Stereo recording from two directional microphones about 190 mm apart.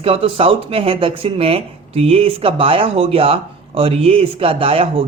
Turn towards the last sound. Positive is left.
turn(degrees=-30)  # may be behind; listen again after turning